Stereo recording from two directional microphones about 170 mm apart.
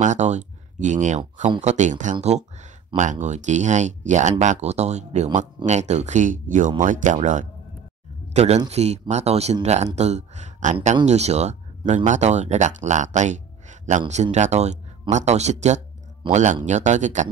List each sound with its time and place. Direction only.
0.0 s speech: 45° right (ahead or behind)